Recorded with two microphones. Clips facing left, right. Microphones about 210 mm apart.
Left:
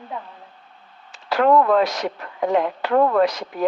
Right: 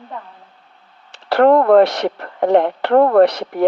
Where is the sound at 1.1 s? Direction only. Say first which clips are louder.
Right 5 dB; 65° right (ahead or behind).